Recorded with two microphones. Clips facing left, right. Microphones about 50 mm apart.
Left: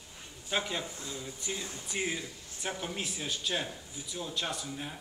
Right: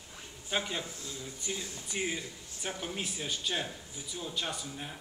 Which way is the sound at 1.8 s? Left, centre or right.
Centre.